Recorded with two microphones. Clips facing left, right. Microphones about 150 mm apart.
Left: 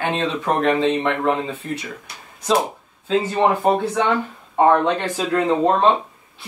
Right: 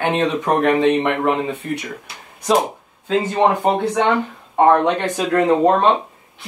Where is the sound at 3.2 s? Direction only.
15° right (ahead or behind).